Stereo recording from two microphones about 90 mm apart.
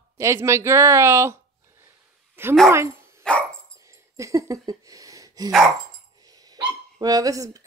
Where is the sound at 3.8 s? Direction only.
35° right (ahead or behind).